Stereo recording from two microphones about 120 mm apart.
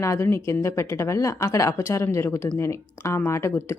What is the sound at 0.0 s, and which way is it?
A woman's voice, 25° left (ahead or behind).